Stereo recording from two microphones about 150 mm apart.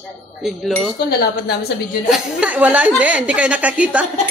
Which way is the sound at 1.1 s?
90° left.